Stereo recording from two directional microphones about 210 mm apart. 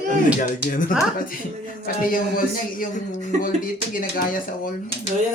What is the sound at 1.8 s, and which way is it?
A man's voice, 45° left (ahead or behind).